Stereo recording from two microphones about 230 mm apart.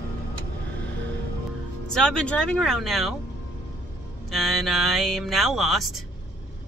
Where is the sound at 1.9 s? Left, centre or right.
Centre.